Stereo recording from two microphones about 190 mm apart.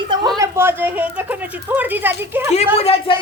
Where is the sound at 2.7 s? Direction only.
30° left (ahead or behind).